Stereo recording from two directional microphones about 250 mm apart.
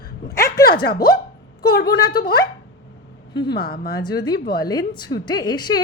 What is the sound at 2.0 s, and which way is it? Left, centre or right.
Speech, centre.